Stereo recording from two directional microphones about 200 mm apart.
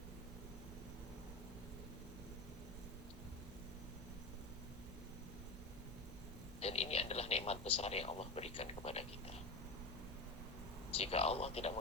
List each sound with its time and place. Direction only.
6.6 s speech: 30° left (ahead or behind)
10.9 s speech: 30° left (ahead or behind)